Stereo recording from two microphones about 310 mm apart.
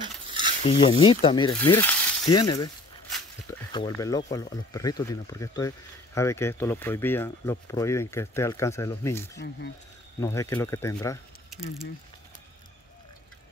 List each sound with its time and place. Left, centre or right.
0.3 s a sound: centre
0.7 s speech: centre
3.7 s speech: centre